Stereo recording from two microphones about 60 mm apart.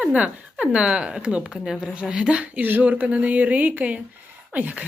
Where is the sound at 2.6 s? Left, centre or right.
Right.